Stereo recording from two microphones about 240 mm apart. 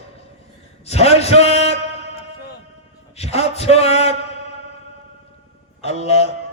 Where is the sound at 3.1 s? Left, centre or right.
Left.